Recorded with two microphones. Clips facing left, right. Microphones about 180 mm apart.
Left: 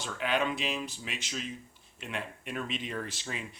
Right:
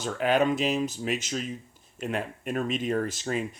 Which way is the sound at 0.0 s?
45° right (ahead or behind).